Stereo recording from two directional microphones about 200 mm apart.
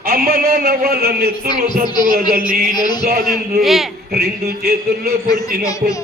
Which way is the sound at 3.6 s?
Centre (ahead or behind).